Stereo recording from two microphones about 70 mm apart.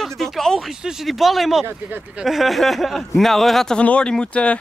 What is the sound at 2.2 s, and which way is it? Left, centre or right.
Speech, centre.